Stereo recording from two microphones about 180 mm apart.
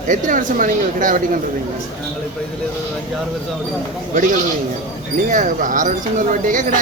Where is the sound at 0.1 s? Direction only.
45° right (ahead or behind).